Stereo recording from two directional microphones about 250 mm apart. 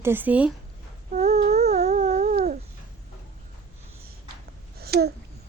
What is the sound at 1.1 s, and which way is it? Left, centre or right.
Humming, right.